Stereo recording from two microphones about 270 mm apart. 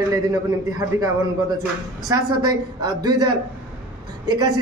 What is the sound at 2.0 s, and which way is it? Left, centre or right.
Speech, centre.